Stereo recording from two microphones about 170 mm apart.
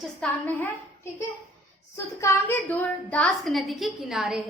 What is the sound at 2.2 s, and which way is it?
A woman's voice, 15° left (ahead or behind).